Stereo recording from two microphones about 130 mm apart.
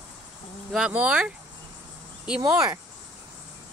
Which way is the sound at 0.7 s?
5° right (ahead or behind).